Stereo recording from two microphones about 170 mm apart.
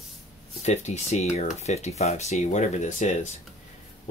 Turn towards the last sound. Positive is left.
turn(degrees=45)  # may be behind; listen again after turning